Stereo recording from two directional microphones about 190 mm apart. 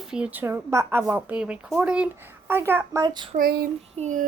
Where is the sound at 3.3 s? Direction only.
50° right (ahead or behind).